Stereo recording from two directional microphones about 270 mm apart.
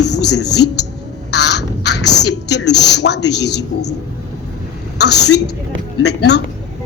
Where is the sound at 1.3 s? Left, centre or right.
Left.